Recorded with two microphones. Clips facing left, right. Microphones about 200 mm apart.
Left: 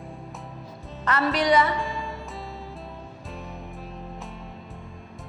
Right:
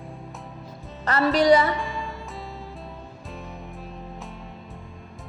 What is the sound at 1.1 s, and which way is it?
Music, 35° right (ahead or behind).